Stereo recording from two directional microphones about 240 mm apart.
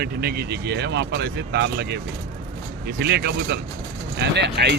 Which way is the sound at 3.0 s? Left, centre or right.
Right.